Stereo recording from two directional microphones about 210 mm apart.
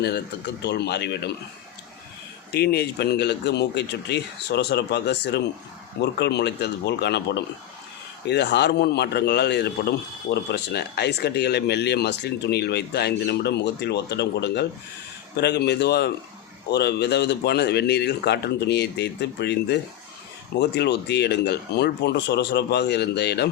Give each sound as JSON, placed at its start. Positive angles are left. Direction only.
{"t": 0.0, "sound": "a man's voice", "side_deg": 55}
{"t": 2.5, "sound": "a man's voice", "side_deg": 50}